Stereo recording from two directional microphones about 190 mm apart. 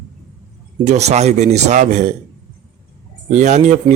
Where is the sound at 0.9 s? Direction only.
35° right (ahead or behind).